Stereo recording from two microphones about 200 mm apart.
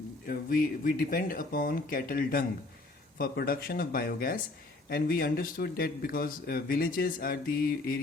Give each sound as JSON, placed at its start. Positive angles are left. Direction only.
{"t": 0.3, "sound": "speech", "side_deg": 45}